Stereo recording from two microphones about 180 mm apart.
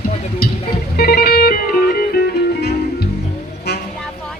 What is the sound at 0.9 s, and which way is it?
Music, 60° left (ahead or behind).